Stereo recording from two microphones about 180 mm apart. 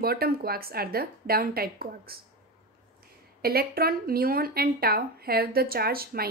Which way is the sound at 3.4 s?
60° right (ahead or behind).